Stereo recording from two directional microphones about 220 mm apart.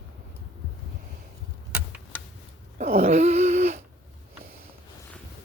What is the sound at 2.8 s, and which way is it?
Dog, 30° right (ahead or behind).